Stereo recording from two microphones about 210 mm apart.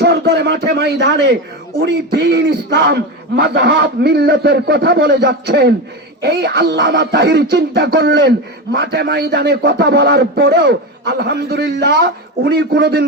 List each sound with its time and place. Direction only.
0.0 s a man's voice: 50° right (ahead or behind)